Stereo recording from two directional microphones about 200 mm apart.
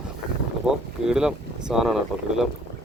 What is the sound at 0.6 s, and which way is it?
Speech, 5° right (ahead or behind).